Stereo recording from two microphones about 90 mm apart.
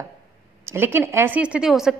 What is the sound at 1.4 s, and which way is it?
Speech, 10° right (ahead or behind).